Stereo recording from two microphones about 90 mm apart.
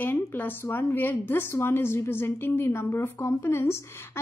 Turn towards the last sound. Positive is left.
turn(degrees=30)  # may be behind; listen again after turning